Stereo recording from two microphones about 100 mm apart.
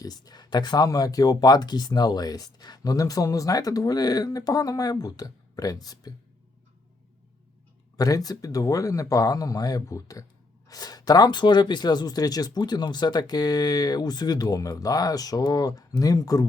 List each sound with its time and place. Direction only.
0.0 s speech: 40° left (ahead or behind)
7.9 s speech: 35° left (ahead or behind)